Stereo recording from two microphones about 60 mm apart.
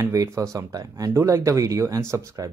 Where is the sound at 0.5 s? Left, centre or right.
Right.